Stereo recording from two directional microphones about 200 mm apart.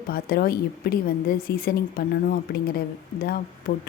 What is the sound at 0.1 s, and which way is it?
A woman's voice, 50° left (ahead or behind).